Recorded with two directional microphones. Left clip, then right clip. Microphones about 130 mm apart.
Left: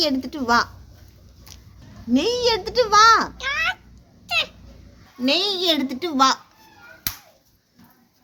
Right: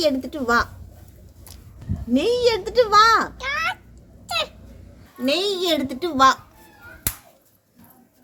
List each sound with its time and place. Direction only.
0.0 s a child's voice: centre (ahead or behind)
2.1 s a child's voice: centre (ahead or behind)
3.3 s babbling: 20° right (ahead or behind)
4.3 s cat: 25° right (ahead or behind)
5.2 s a child's voice: 5° right (ahead or behind)